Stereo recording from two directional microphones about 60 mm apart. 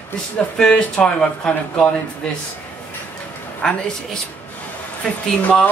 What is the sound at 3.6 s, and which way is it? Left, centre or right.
Speech, centre.